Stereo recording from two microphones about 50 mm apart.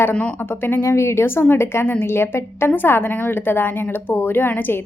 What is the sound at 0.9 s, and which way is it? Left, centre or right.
A woman's voice, left.